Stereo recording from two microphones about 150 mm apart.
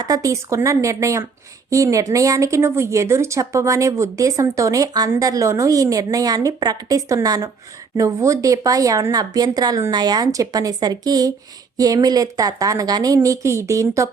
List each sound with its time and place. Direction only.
0.0 s speech: 25° right (ahead or behind)